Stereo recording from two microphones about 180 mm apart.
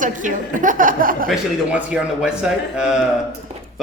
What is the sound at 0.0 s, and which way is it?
Speech, 45° right (ahead or behind).